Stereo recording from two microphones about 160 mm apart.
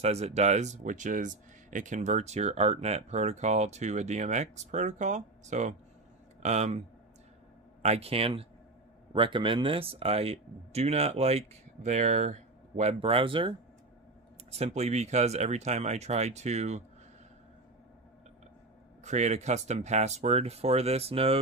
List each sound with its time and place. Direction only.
0.0 s speech: 40° right (ahead or behind)
7.8 s speech: 40° right (ahead or behind)
14.5 s speech: 45° right (ahead or behind)
19.0 s speech: 45° right (ahead or behind)